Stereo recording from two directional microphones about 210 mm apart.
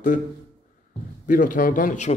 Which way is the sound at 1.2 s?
40° left (ahead or behind).